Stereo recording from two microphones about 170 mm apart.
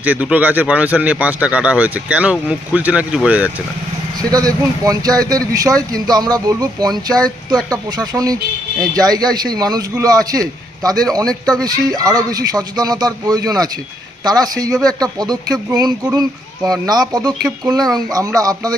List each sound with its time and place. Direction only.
0.0 s speech: 10° right (ahead or behind)
4.2 s speech: 20° right (ahead or behind)